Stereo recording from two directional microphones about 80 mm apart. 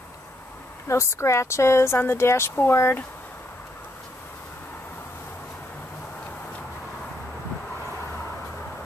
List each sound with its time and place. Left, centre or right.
0.8 s speech: left